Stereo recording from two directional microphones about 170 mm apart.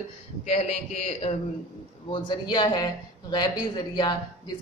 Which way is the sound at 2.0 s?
25° left (ahead or behind).